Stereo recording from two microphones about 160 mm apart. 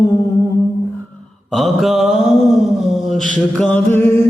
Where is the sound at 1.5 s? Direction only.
Centre (ahead or behind).